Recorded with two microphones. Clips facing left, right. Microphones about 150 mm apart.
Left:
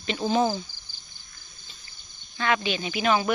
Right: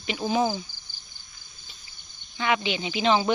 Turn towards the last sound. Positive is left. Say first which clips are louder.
# right 1 dB
turn(degrees=-25)  # may be behind; listen again after turning